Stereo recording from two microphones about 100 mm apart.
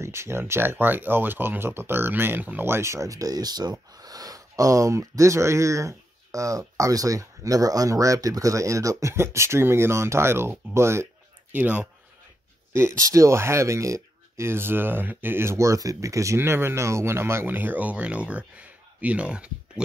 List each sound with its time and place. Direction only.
0.0 s speech: 25° right (ahead or behind)
11.5 s speech: 15° right (ahead or behind)
12.7 s speech: 30° right (ahead or behind); by 19.5 s 10° right (ahead or behind)